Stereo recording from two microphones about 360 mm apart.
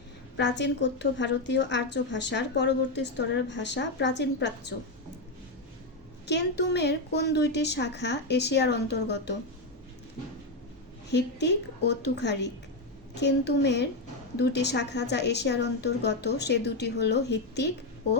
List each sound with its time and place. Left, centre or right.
0.3 s a woman's voice: left
6.2 s a woman's voice: left
11.1 s a woman's voice: left